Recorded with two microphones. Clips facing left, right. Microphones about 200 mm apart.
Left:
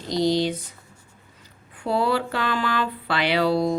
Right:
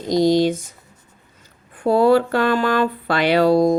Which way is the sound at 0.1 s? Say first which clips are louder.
Right 6 dB; 45° right (ahead or behind).